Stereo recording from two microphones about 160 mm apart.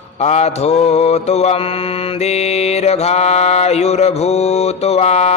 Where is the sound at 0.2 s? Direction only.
45° left (ahead or behind).